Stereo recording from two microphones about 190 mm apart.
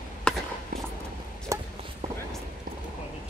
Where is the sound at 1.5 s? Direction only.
15° right (ahead or behind).